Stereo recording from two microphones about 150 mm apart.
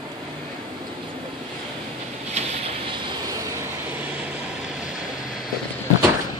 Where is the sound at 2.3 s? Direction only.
45° right (ahead or behind).